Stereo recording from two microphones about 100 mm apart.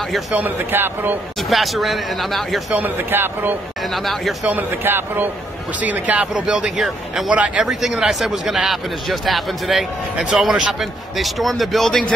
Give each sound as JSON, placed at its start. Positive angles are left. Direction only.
{"t": 0.3, "sound": "speech", "side_deg": -20}
{"t": 1.5, "sound": "speech", "side_deg": 0}
{"t": 2.7, "sound": "speech", "side_deg": -20}
{"t": 3.9, "sound": "speech", "side_deg": 0}
{"t": 4.5, "sound": "speech", "side_deg": -20}
{"t": 7.6, "sound": "speech", "side_deg": -5}